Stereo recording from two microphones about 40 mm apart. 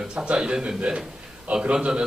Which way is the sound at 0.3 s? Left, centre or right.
Centre.